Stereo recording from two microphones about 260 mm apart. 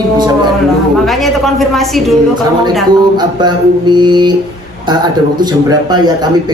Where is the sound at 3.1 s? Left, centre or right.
Centre.